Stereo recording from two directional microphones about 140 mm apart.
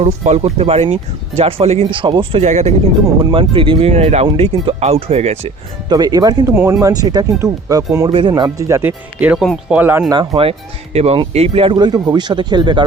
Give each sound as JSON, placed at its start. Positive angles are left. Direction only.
{"t": 0.0, "sound": "speech", "side_deg": -50}
{"t": 2.4, "sound": "speech", "side_deg": -55}
{"t": 3.2, "sound": "speech", "side_deg": -40}
{"t": 5.9, "sound": "speech", "side_deg": -30}
{"t": 6.5, "sound": "speech", "side_deg": -15}
{"t": 6.8, "sound": "speech", "side_deg": -25}
{"t": 8.1, "sound": "speech", "side_deg": -35}
{"t": 8.4, "sound": "speech", "side_deg": -20}
{"t": 10.1, "sound": "speech", "side_deg": -35}
{"t": 10.9, "sound": "speech", "side_deg": -50}